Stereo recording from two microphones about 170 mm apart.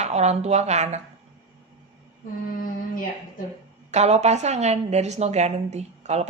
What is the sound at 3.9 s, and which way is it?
A woman's voice, 40° right (ahead or behind).